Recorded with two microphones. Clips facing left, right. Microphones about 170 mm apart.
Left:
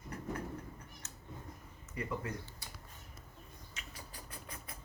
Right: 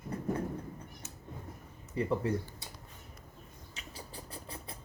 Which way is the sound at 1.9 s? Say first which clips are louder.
Right 9 dB; 30° right (ahead or behind).